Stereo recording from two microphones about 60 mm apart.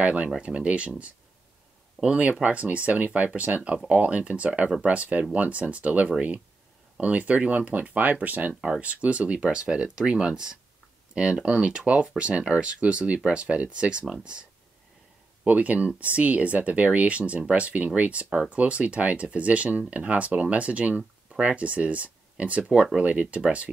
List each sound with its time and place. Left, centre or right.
0.0 s speech: centre
8.5 s speech: centre
15.4 s speech: right